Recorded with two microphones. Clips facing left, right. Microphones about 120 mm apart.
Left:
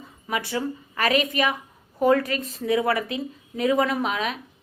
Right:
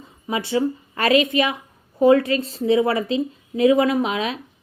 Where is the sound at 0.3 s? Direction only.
25° right (ahead or behind).